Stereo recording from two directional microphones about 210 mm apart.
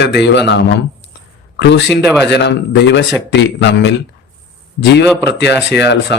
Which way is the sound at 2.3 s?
55° left (ahead or behind).